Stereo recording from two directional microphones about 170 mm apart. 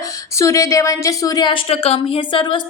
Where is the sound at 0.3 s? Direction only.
15° left (ahead or behind).